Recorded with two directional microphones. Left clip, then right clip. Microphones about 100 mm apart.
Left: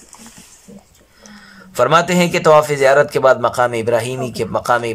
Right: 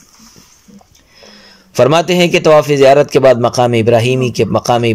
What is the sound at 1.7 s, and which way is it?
A man's voice, 25° right (ahead or behind).